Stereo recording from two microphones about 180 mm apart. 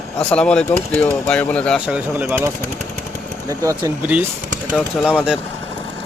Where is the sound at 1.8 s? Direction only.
5° right (ahead or behind).